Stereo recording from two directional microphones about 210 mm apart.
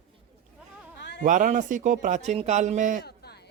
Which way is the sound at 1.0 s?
55° left (ahead or behind).